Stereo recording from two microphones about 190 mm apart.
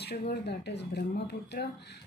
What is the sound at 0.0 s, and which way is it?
Speech, 60° left (ahead or behind).